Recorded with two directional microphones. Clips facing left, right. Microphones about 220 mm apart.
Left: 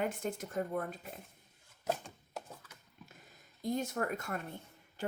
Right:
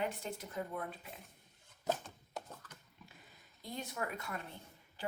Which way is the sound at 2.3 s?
10° left (ahead or behind).